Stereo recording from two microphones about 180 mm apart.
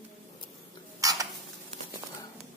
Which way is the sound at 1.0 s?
20° right (ahead or behind).